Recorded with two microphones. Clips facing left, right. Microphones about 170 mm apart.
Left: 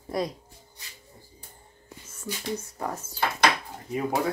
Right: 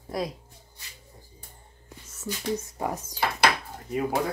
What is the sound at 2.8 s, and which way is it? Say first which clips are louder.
Speech: right 2 dB; 15° right (ahead or behind).